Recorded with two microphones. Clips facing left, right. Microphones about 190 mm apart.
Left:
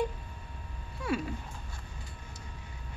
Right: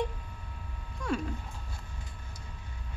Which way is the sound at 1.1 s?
5° left (ahead or behind).